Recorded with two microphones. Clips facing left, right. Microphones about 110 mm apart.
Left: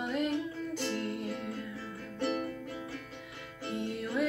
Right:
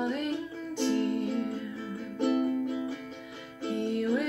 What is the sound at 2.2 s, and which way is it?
Music, 20° right (ahead or behind).